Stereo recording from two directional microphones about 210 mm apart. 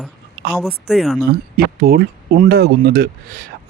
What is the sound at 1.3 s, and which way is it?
Speech, 45° right (ahead or behind).